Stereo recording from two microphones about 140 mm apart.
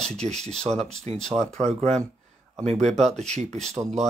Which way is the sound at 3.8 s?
25° right (ahead or behind).